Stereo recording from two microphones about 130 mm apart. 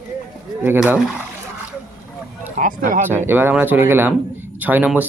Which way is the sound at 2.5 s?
90° right.